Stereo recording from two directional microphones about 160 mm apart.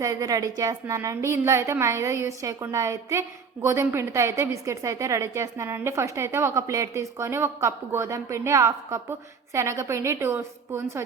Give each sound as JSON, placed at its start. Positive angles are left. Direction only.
{"t": 0.0, "sound": "a woman's voice", "side_deg": -20}